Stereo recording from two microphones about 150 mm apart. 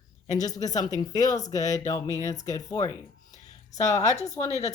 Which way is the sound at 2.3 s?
25° left (ahead or behind).